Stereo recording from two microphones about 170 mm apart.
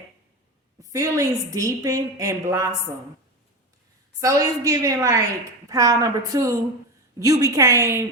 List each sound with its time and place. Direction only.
0.8 s a woman's voice: 20° right (ahead or behind)
4.2 s a woman's voice: 20° right (ahead or behind)